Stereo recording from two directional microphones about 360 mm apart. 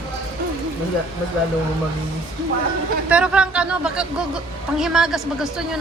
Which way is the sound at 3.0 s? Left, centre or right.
Centre.